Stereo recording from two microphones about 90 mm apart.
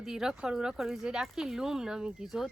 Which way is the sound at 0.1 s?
5° right (ahead or behind).